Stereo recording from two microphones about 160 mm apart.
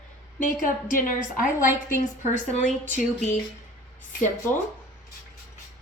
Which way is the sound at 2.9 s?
50° left (ahead or behind).